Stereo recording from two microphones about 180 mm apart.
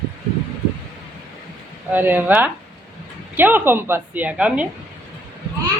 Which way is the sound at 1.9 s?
10° right (ahead or behind).